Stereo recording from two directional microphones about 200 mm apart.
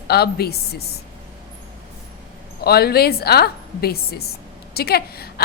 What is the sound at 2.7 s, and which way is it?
A woman's voice, 50° left (ahead or behind).